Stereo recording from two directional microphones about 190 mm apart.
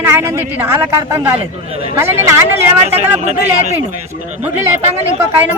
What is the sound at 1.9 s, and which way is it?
Speech, 15° right (ahead or behind).